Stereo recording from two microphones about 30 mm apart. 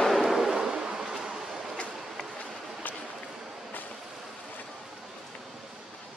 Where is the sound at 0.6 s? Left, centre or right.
Right.